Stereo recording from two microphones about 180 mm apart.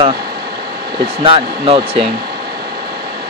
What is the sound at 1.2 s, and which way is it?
Speech, 30° right (ahead or behind).